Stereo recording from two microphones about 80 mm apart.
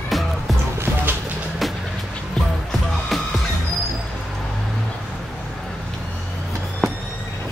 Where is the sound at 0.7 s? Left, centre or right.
Right.